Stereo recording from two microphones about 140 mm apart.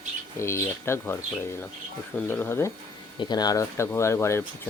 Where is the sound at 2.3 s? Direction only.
15° left (ahead or behind).